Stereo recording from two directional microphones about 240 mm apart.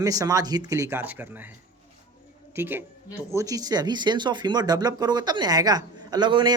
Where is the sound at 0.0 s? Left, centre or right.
Centre.